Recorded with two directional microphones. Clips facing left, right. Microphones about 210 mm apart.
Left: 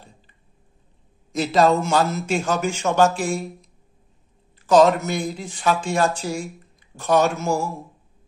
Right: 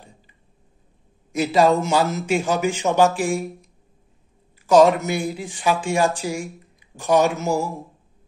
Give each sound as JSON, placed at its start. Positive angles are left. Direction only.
{"t": 1.3, "sound": "speech", "side_deg": -10}
{"t": 4.6, "sound": "speech", "side_deg": -10}